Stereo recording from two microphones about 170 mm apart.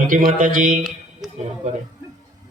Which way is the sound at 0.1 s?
55° right (ahead or behind).